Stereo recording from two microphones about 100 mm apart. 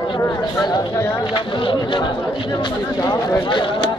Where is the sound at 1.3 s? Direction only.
55° left (ahead or behind).